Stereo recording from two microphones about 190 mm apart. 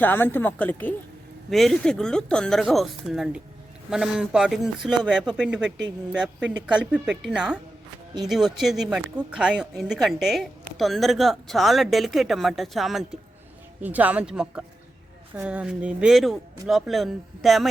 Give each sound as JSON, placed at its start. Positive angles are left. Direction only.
{"t": 0.0, "sound": "speech", "side_deg": 10}